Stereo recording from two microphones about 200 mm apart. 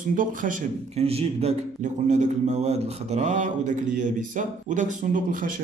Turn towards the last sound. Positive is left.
turn(degrees=-45)  # may be behind; listen again after turning